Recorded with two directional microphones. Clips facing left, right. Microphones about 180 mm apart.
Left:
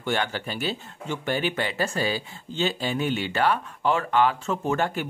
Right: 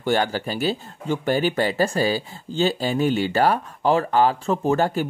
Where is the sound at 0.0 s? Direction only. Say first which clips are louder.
Right 5 dB; 40° right (ahead or behind).